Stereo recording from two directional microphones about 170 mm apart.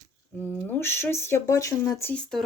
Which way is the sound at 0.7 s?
15° left (ahead or behind).